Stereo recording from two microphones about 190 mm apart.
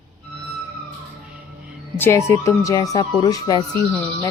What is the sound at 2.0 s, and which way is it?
Speech, 15° left (ahead or behind).